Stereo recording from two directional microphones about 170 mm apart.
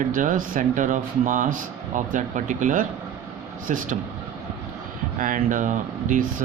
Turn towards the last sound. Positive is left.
turn(degrees=-50)  # may be behind; listen again after turning